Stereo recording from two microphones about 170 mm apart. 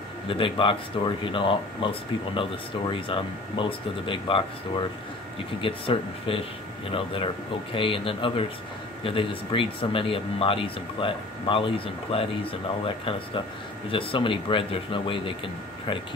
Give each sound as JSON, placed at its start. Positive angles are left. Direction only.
{"t": 0.3, "sound": "speech", "side_deg": 30}